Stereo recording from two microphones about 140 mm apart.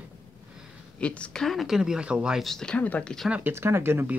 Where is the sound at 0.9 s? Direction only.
10° left (ahead or behind).